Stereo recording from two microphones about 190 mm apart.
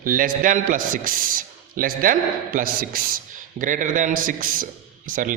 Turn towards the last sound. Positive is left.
turn(degrees=-45)  # may be behind; listen again after turning